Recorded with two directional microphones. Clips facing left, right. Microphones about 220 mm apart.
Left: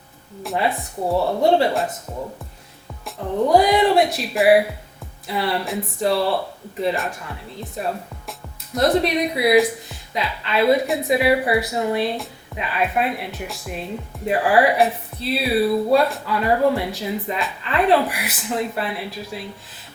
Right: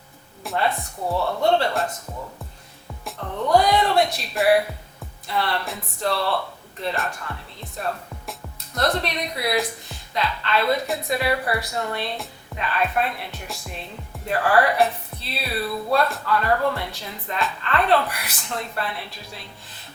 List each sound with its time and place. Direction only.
0.4 s a woman's voice: centre (ahead or behind)
1.1 s speech: 30° left (ahead or behind)
1.5 s a woman's voice: 5° left (ahead or behind)
3.2 s a woman's voice: 5° left (ahead or behind)